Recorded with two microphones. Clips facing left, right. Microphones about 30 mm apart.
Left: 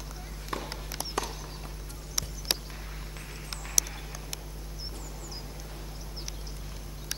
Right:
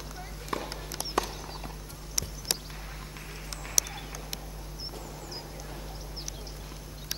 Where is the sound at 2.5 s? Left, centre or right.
Left.